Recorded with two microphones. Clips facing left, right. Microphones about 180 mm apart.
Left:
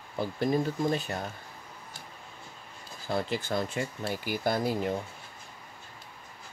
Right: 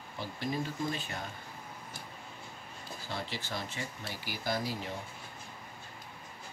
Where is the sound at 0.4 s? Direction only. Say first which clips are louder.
Left 7 dB; 45° left (ahead or behind).